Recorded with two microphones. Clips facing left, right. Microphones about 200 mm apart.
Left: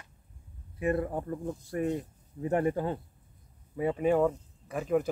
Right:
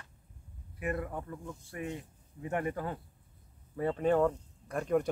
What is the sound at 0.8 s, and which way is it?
Speech, 30° left (ahead or behind).